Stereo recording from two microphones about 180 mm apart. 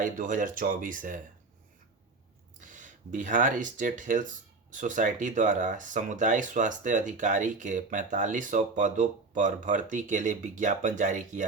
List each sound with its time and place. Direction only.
0.0 s speech: 50° right (ahead or behind)
2.6 s speech: 45° right (ahead or behind)